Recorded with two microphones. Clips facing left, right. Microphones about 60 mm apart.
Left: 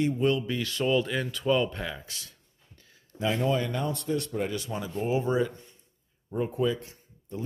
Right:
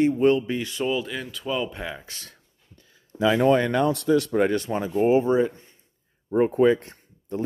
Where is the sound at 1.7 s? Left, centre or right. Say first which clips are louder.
Right 2 dB; centre.